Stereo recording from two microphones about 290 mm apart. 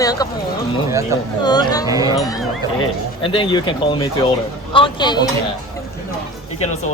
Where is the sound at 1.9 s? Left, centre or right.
Centre.